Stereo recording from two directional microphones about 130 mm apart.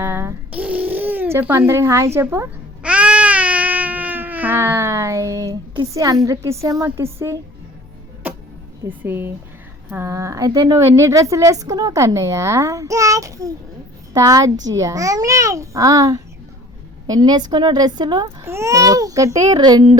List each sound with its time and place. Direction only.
0.0 s babbling: 15° right (ahead or behind)
2.8 s baby cry: 10° right (ahead or behind); by 6.1 s 25° right (ahead or behind)
6.2 s a woman's voice: 25° right (ahead or behind)
8.2 s music: 15° right (ahead or behind)
8.9 s a woman's voice: 15° right (ahead or behind); by 18.3 s 30° right (ahead or behind)
18.4 s a woman's voice: 20° right (ahead or behind)